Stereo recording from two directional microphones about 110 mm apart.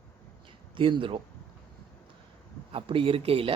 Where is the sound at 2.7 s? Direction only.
55° right (ahead or behind).